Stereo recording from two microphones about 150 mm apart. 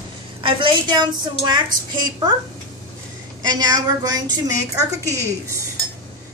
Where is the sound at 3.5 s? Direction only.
25° right (ahead or behind).